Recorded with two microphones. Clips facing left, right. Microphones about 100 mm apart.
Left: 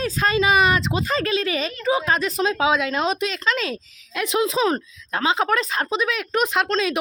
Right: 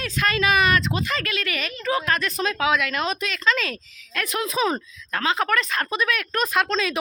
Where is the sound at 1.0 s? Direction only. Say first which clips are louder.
Left 5 dB; 30° left (ahead or behind).